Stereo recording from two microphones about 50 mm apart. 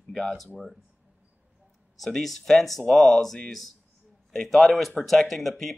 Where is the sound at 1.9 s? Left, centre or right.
Centre.